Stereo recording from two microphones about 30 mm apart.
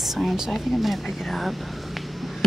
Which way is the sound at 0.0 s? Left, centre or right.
Centre.